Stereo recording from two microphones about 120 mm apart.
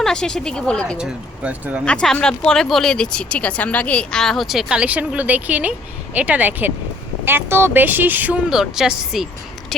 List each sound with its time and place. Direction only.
0.0 s speech: 5° left (ahead or behind)
0.9 s speech: 10° right (ahead or behind)
1.8 s speech: 5° left (ahead or behind); by 8.4 s 15° right (ahead or behind)
8.4 s speech: 5° right (ahead or behind)